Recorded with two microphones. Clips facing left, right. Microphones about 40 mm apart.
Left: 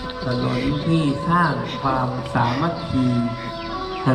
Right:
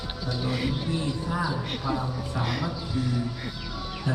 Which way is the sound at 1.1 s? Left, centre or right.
Left.